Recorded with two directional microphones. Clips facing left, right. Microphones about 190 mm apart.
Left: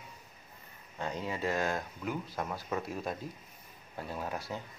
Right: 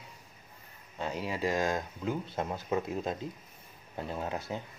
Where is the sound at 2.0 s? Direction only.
25° right (ahead or behind).